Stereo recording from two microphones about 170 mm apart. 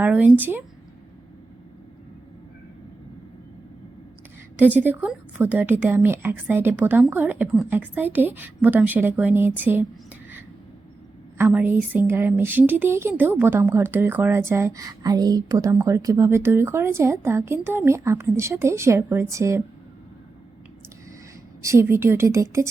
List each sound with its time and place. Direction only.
0.0 s speech: 10° right (ahead or behind)
4.5 s speech: 10° right (ahead or behind)
11.3 s speech: 10° right (ahead or behind)
21.6 s speech: 15° right (ahead or behind)